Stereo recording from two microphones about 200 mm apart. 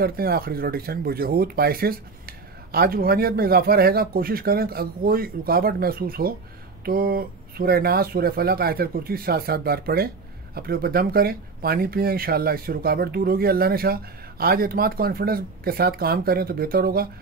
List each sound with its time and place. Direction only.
0.0 s speech: 50° right (ahead or behind)